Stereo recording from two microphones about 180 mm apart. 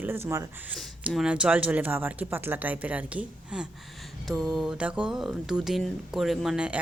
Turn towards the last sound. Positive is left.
turn(degrees=-5)  # may be behind; listen again after turning